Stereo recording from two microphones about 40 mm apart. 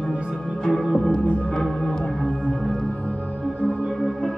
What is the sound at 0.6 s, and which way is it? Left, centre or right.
Music, centre.